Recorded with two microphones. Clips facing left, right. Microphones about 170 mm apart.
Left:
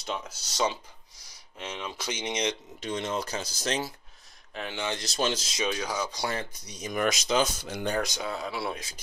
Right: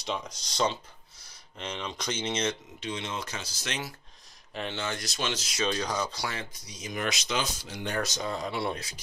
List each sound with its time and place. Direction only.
0.0 s speech: 5° left (ahead or behind)
2.8 s speech: 45° left (ahead or behind)
4.6 s speech: 10° left (ahead or behind)
5.0 s speech: 35° left (ahead or behind)
5.6 s speech: 10° left (ahead or behind)
6.9 s speech: 50° left (ahead or behind)
7.2 s speech: 40° left (ahead or behind)
7.9 s speech: 15° left (ahead or behind)